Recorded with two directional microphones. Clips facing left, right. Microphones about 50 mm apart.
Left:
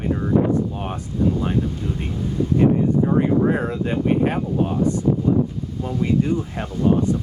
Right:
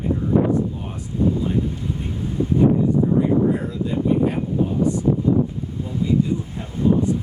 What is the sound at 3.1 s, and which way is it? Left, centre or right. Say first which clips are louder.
Speech: even; left.